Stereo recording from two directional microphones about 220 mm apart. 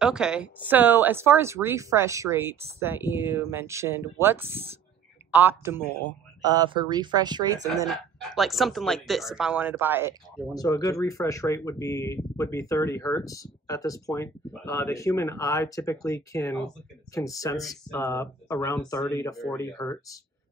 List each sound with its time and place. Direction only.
0.0 s speech: 5° right (ahead or behind)
7.7 s speech: centre (ahead or behind)
10.5 s speech: 15° left (ahead or behind)